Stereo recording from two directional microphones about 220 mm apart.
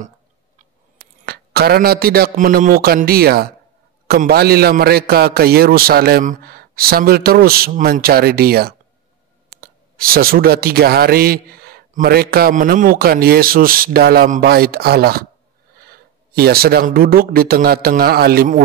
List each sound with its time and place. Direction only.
1.2 s speech: 45° right (ahead or behind)